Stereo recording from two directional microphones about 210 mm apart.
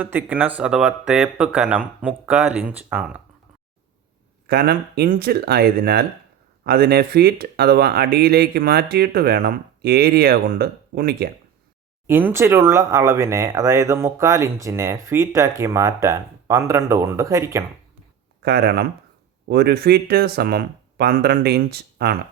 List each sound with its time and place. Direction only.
0.0 s speech: 10° right (ahead or behind)
4.4 s speech: 45° right (ahead or behind)
12.0 s speech: 10° right (ahead or behind)
18.4 s speech: 50° right (ahead or behind)